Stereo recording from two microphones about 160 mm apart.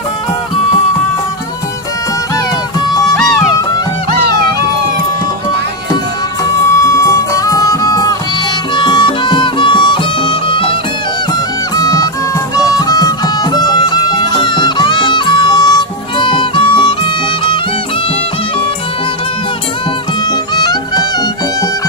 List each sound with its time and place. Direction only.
6.7 s music: 20° left (ahead or behind)
11.8 s music: 20° left (ahead or behind)
20.3 s music: 25° left (ahead or behind)